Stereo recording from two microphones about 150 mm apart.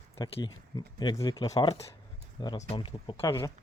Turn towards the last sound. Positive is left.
turn(degrees=20)  # may be behind; listen again after turning